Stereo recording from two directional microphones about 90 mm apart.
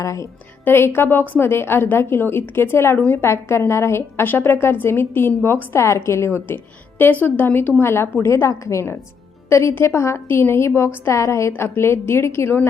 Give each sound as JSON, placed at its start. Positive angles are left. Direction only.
{"t": 0.0, "sound": "a woman's voice", "side_deg": 35}
{"t": 0.6, "sound": "a woman's voice", "side_deg": 25}